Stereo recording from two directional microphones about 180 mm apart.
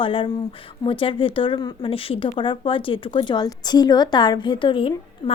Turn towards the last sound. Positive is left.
turn(degrees=30)  # may be behind; listen again after turning